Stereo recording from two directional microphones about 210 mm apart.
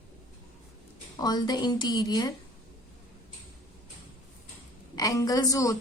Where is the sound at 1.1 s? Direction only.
20° left (ahead or behind).